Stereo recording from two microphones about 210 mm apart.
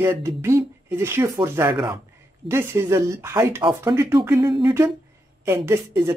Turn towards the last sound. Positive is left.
turn(degrees=-15)  # may be behind; listen again after turning